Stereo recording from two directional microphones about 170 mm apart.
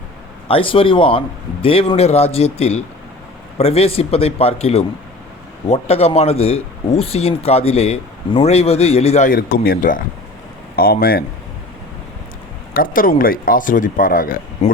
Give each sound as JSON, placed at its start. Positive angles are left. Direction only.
{"t": 0.4, "sound": "a man's voice", "side_deg": 30}
{"t": 9.3, "sound": "speech", "side_deg": 60}
{"t": 12.7, "sound": "speech", "side_deg": 55}